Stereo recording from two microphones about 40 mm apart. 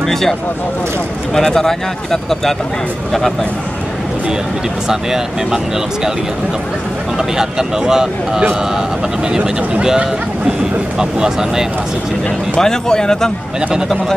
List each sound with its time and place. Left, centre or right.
0.0 s speech: centre
4.8 s speech: centre
7.2 s speech: centre
11.0 s speech: centre
12.5 s speech: centre